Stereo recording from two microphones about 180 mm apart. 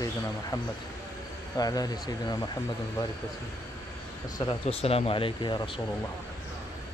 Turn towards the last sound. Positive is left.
turn(degrees=25)  # may be behind; listen again after turning